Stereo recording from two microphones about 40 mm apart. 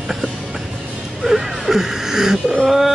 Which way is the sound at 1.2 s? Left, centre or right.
Centre.